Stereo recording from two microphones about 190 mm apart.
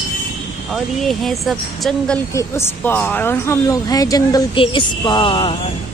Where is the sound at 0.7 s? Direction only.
Centre (ahead or behind).